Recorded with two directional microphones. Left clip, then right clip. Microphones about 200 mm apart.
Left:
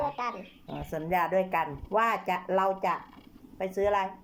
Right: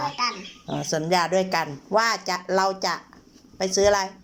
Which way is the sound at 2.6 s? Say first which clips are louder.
Right 4 dB; 10° left (ahead or behind).